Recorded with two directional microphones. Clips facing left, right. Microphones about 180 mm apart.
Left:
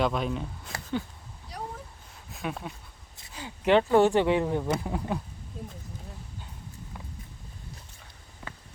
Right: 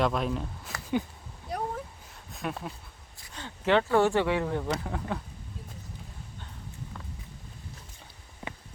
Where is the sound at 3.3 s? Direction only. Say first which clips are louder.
Left 3 dB; 15° left (ahead or behind).